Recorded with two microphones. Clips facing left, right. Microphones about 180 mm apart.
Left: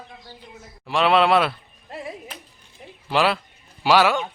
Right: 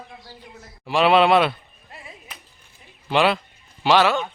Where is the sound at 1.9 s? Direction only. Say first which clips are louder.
Left 10 dB; 60° left (ahead or behind).